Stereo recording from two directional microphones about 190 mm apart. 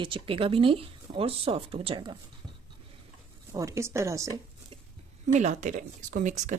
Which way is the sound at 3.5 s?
15° right (ahead or behind).